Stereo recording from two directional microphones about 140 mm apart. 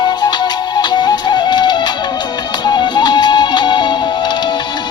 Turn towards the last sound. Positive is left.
turn(degrees=30)  # may be behind; listen again after turning